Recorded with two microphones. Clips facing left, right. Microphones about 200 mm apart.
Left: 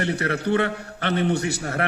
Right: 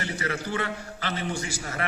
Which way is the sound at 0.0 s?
60° left (ahead or behind).